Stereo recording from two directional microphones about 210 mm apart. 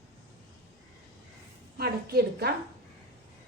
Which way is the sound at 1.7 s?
50° right (ahead or behind).